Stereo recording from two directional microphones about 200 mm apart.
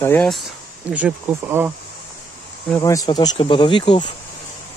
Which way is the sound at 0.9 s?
10° right (ahead or behind).